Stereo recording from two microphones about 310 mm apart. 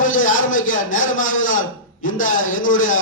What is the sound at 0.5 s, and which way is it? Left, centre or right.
A man's voice, left.